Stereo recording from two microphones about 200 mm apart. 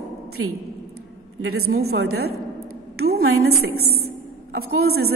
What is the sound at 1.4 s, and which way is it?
Speech, 90° right.